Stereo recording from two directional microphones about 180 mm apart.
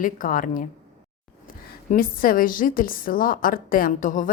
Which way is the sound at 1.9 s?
50° left (ahead or behind).